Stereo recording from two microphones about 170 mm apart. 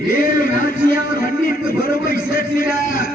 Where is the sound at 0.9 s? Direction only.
60° left (ahead or behind).